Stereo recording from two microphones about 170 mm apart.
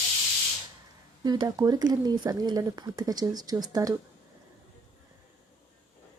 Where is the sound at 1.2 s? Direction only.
20° right (ahead or behind).